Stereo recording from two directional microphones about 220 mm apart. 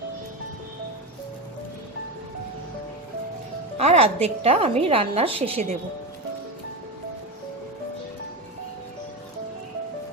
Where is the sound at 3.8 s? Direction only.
30° right (ahead or behind).